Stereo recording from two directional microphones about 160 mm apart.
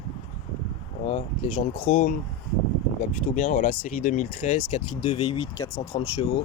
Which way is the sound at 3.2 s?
50° left (ahead or behind).